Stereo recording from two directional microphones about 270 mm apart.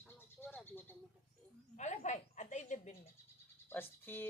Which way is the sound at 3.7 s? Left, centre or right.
Centre.